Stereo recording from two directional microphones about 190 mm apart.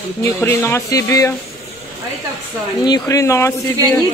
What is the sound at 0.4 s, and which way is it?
Speech, 10° left (ahead or behind).